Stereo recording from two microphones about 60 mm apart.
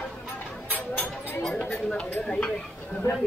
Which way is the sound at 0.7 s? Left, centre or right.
Left.